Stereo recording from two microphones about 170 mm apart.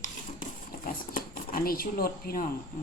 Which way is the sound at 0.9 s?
55° left (ahead or behind).